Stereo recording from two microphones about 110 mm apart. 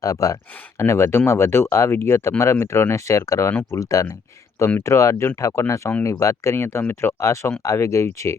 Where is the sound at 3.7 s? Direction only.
30° left (ahead or behind).